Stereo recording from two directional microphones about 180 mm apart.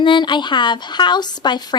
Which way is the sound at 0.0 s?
25° left (ahead or behind).